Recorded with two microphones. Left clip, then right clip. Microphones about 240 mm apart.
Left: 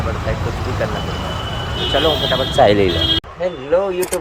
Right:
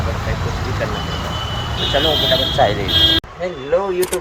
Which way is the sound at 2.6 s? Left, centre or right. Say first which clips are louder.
Left 5 dB; left.